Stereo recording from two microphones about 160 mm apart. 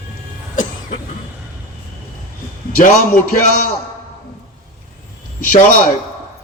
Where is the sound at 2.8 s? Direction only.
55° left (ahead or behind).